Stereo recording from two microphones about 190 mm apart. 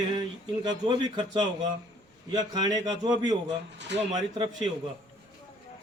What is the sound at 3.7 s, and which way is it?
Speech, 70° right (ahead or behind).